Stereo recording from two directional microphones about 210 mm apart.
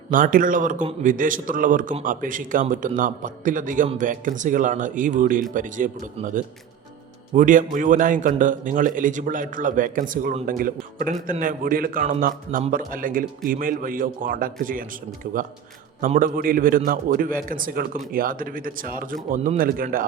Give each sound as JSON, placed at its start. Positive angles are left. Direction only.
{"t": 0.1, "sound": "a man's voice", "side_deg": -40}
{"t": 16.0, "sound": "a man's voice", "side_deg": -40}